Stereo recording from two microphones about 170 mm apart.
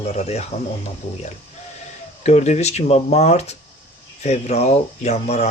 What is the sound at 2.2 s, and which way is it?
Speech, 40° left (ahead or behind).